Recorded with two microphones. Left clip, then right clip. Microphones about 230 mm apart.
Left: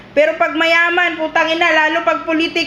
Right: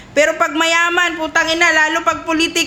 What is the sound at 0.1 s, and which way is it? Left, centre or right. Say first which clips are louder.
A woman's voice: left 1 dB; centre.